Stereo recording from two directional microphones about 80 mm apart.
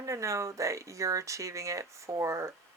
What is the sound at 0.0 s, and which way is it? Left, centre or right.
Speech, right.